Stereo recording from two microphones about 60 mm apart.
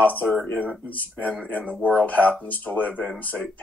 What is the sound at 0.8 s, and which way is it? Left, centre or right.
Speech, left.